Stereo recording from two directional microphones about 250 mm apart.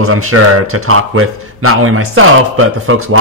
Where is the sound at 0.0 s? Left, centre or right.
Right.